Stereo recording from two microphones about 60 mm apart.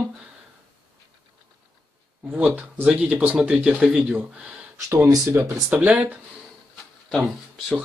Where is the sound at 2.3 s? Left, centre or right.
Right.